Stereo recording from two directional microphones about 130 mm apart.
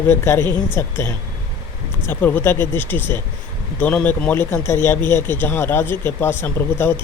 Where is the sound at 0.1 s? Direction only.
20° left (ahead or behind).